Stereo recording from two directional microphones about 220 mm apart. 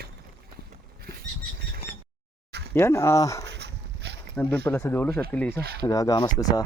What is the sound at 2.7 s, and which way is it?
Speech, 10° left (ahead or behind).